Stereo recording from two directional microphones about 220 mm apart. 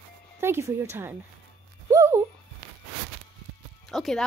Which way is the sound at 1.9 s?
15° right (ahead or behind).